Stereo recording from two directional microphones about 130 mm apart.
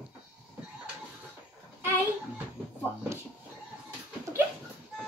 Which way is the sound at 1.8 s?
15° right (ahead or behind).